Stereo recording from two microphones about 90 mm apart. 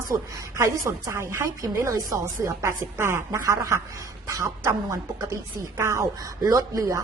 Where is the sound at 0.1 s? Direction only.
35° right (ahead or behind).